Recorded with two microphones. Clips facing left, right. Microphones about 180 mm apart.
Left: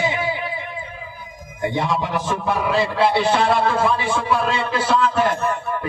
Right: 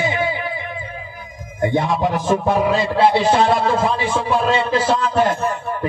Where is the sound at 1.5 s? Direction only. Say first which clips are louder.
Right 3 dB; 50° right (ahead or behind).